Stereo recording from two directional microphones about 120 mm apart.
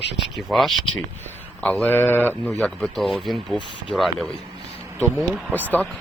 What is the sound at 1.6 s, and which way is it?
A man's voice, 10° left (ahead or behind).